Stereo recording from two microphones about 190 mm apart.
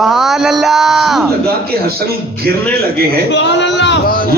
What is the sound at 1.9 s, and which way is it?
Speech, 55° right (ahead or behind).